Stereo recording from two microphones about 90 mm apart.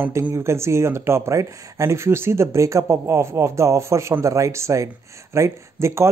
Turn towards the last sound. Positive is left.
turn(degrees=-30)  # may be behind; listen again after turning